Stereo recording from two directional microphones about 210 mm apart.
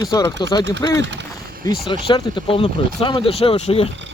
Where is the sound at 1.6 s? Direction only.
15° left (ahead or behind).